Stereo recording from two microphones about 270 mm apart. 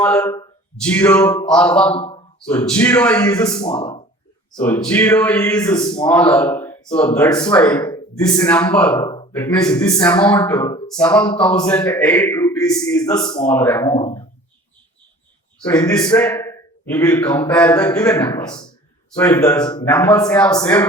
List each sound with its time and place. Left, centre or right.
0.0 s a man's voice: centre
4.6 s a man's voice: centre
6.1 s a man's voice: centre
15.6 s a man's voice: centre